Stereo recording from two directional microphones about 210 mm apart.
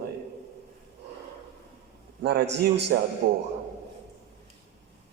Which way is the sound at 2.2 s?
50° right (ahead or behind).